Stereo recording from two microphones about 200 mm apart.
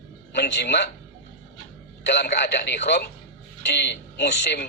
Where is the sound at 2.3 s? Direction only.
55° left (ahead or behind).